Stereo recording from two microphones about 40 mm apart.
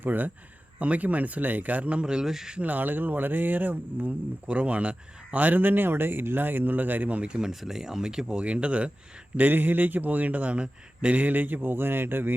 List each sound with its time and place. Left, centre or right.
0.0 s speech: right
0.8 s speech: right
2.2 s speech: centre
2.6 s speech: right
4.4 s speech: right
7.3 s speech: centre
8.4 s speech: right
9.4 s speech: right